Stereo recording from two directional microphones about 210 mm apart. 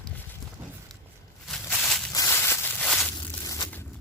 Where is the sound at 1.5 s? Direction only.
Centre (ahead or behind).